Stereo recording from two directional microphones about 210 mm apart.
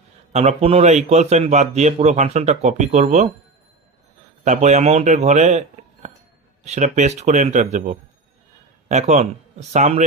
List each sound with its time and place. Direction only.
0.3 s a man's voice: 30° right (ahead or behind)
4.5 s a man's voice: 35° right (ahead or behind)